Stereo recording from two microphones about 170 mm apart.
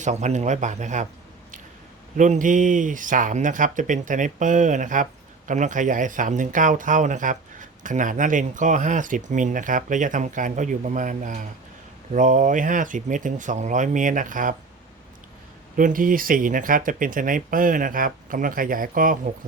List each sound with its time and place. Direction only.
0.0 s speech: 45° right (ahead or behind)
2.1 s speech: 45° right (ahead or behind)
15.7 s speech: 55° right (ahead or behind)